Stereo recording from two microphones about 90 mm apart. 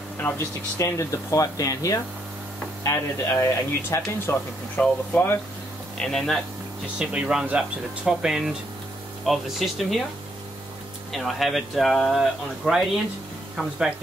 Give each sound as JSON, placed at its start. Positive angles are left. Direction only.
{"t": 0.2, "sound": "speech", "side_deg": 25}
{"t": 0.7, "sound": "speech", "side_deg": 35}
{"t": 4.3, "sound": "speech", "side_deg": 25}
{"t": 5.9, "sound": "speech", "side_deg": 5}
{"t": 7.0, "sound": "speech", "side_deg": -10}
{"t": 11.1, "sound": "speech", "side_deg": 0}